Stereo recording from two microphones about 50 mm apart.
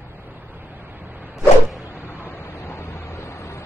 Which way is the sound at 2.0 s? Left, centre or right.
Left.